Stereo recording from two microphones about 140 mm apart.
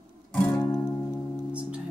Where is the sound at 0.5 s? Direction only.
20° left (ahead or behind).